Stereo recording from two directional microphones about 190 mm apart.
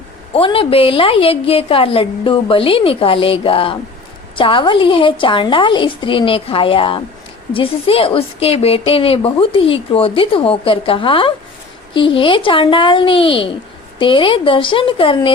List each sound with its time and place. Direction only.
0.3 s a woman's voice: 30° left (ahead or behind)